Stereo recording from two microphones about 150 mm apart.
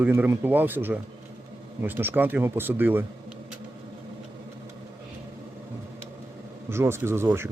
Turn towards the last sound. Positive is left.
turn(degrees=-15)  # may be behind; listen again after turning